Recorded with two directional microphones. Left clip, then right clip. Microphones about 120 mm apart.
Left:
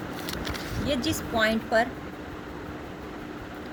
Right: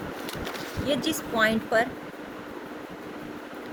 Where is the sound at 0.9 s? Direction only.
50° right (ahead or behind).